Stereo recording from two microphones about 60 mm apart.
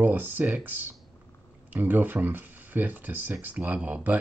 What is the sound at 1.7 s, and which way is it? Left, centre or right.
Speech, right.